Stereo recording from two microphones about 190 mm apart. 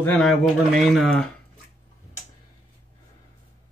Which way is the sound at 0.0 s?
5° left (ahead or behind).